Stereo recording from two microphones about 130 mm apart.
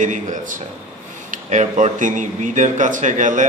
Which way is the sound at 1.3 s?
70° right (ahead or behind).